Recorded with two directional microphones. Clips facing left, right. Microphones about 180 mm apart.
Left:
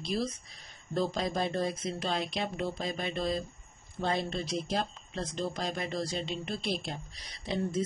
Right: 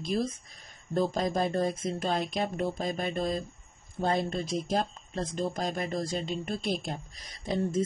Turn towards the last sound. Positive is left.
turn(degrees=-45)  # may be behind; listen again after turning